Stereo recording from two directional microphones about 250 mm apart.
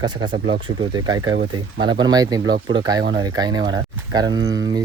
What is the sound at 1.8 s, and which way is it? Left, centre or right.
Speech, centre.